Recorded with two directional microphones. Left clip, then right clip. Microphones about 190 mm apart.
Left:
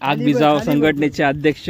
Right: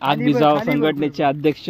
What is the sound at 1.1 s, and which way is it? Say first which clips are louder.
Speech: left 1 dB; 20° left (ahead or behind).